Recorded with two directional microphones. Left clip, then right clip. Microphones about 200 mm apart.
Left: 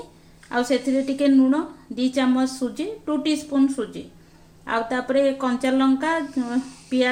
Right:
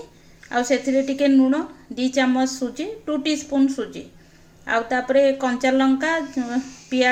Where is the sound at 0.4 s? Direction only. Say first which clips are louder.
Right 1 dB; 30° left (ahead or behind).